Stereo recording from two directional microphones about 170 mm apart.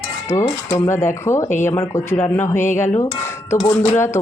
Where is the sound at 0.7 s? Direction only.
15° left (ahead or behind).